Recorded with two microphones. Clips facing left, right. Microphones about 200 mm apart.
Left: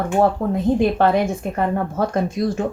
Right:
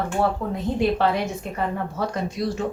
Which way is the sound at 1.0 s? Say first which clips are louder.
Left 5 dB; 50° left (ahead or behind).